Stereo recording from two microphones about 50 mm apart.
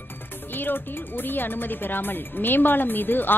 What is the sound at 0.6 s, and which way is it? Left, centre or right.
A woman's voice, left.